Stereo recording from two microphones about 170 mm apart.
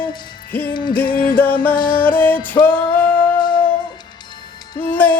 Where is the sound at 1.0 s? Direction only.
60° left (ahead or behind).